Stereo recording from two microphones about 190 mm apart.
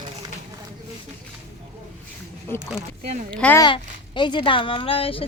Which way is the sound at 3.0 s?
35° right (ahead or behind).